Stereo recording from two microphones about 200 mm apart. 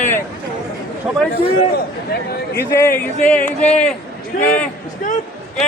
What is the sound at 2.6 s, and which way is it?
Speech, 10° left (ahead or behind).